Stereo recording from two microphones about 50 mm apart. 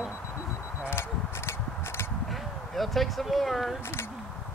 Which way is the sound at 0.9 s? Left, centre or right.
Left.